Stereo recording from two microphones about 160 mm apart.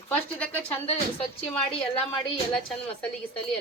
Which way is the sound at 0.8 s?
40° left (ahead or behind).